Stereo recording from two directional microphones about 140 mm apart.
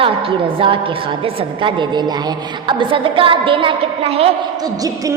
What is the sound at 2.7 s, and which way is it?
A woman's voice, 35° right (ahead or behind).